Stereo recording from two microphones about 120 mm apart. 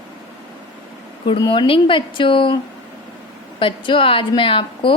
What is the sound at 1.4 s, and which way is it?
A woman's voice, 40° left (ahead or behind).